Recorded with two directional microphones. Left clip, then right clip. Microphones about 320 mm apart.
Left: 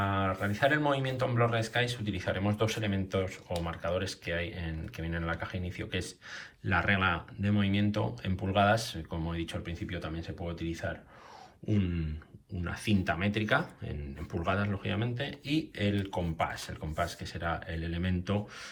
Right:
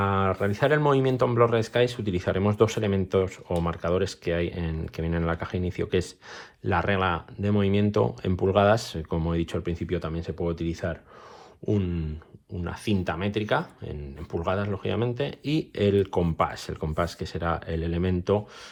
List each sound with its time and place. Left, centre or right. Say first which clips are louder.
0.2 s speech: right 5 dB; centre